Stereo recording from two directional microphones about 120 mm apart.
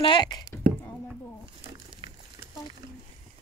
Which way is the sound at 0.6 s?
90° right.